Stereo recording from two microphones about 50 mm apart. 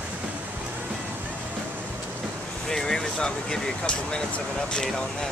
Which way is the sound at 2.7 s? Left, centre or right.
Centre.